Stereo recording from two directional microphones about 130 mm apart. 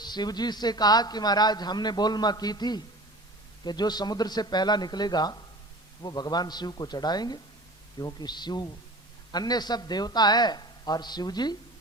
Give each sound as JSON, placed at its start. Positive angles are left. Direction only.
{"t": 0.0, "sound": "a man's voice", "side_deg": 35}